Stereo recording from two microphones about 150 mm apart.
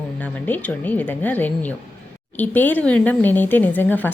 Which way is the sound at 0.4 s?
10° left (ahead or behind).